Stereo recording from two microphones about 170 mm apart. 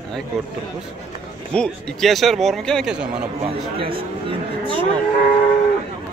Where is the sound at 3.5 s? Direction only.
30° right (ahead or behind).